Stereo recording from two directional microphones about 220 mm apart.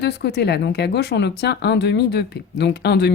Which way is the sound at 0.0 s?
50° left (ahead or behind).